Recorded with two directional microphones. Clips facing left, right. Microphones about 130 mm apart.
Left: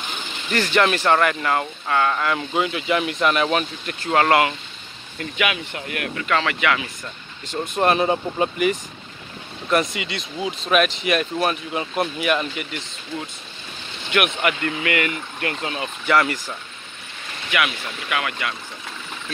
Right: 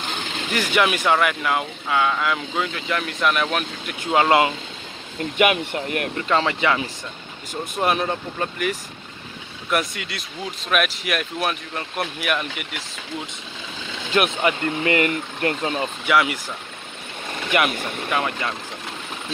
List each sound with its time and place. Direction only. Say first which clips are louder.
0.5 s speech: left 2 dB; 10° right (ahead or behind)
4.0 s speech: even; 15° right (ahead or behind)
6.2 s speech: even; 25° right (ahead or behind)
7.7 s speech: left 3 dB; centre (ahead or behind)
14.1 s speech: right 1 dB; 30° right (ahead or behind)
16.1 s speech: left 1 dB; 5° right (ahead or behind)
17.5 s speech: right 2 dB; 45° right (ahead or behind)
18.1 s speech: right 1 dB; 30° right (ahead or behind)